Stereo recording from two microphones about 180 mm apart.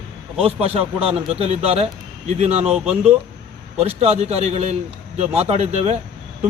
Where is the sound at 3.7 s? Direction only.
35° right (ahead or behind).